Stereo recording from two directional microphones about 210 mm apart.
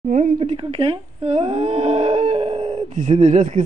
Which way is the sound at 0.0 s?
35° right (ahead or behind).